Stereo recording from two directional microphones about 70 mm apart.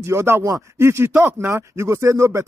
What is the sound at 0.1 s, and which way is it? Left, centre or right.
Speech, right.